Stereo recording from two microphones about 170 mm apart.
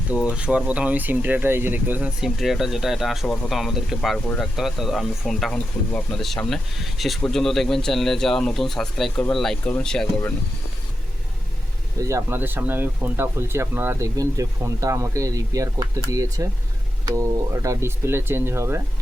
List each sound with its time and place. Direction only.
0.1 s speech: 5° right (ahead or behind)
11.9 s speech: 15° right (ahead or behind)